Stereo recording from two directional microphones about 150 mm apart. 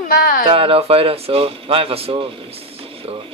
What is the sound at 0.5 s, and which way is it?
Speech, 40° right (ahead or behind).